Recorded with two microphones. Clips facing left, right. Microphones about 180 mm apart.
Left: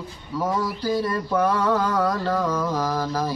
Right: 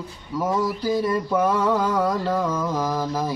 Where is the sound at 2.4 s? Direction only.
20° right (ahead or behind).